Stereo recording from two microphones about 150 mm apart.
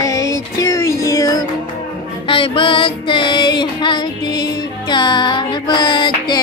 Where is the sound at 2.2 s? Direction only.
35° left (ahead or behind).